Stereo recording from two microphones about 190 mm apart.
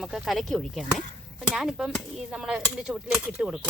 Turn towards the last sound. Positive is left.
turn(degrees=-5)  # may be behind; listen again after turning